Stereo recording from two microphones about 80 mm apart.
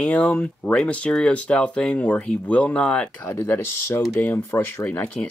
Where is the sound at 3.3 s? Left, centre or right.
Left.